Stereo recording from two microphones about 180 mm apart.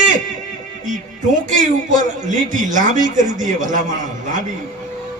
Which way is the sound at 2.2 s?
45° right (ahead or behind).